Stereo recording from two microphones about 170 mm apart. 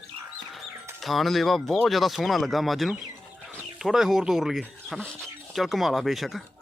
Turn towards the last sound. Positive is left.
turn(degrees=0)  # may be behind; listen again after turning